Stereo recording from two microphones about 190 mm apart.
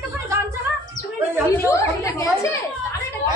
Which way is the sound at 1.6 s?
15° left (ahead or behind).